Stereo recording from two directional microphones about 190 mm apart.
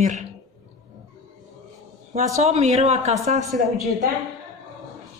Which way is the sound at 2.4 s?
35° right (ahead or behind).